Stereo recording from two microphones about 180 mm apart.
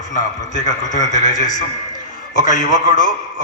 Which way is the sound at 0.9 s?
45° left (ahead or behind).